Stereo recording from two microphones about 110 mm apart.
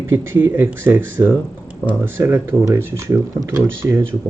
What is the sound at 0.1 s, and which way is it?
Speech, 20° right (ahead or behind).